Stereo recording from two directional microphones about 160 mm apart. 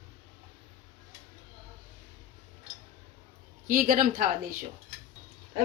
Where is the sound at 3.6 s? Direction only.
60° right (ahead or behind).